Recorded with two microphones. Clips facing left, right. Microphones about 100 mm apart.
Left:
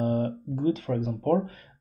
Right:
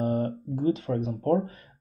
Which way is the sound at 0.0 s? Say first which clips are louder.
Left 1 dB; 25° right (ahead or behind).